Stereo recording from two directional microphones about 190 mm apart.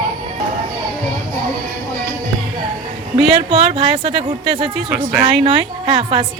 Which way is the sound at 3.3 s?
30° right (ahead or behind).